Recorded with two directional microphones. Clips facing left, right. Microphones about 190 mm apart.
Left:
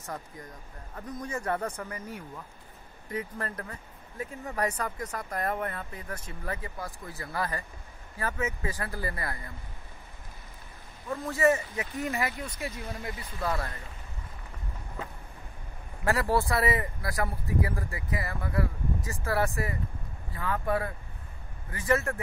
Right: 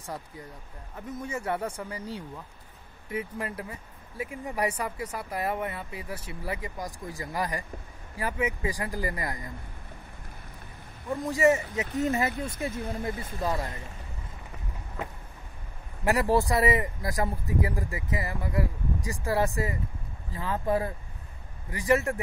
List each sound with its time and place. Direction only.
0.0 s speech: 10° right (ahead or behind)
3.1 s speech: 10° right (ahead or behind)
11.1 s speech: 15° right (ahead or behind)
12.6 s speech: 50° right (ahead or behind)
13.4 s speech: 15° right (ahead or behind)
16.0 s speech: 15° right (ahead or behind)